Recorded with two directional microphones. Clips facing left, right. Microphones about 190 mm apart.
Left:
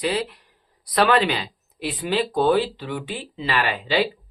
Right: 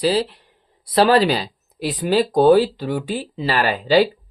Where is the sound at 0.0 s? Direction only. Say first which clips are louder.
Right 5 dB; 30° right (ahead or behind).